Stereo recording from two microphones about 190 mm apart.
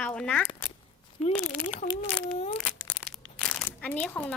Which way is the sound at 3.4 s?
5° left (ahead or behind).